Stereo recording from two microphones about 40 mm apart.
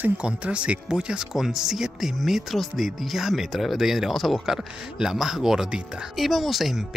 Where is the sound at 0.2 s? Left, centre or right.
Right.